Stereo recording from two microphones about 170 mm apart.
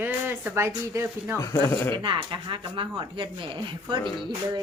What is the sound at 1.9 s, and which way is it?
Speech, 30° right (ahead or behind).